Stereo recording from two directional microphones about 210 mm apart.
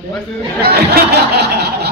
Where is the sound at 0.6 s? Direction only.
50° right (ahead or behind).